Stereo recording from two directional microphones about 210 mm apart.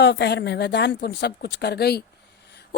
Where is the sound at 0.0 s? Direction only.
55° left (ahead or behind).